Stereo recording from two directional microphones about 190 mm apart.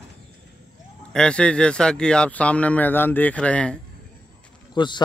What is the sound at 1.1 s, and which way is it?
Speech, 5° left (ahead or behind).